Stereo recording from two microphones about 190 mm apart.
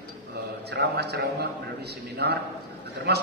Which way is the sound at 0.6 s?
60° right (ahead or behind).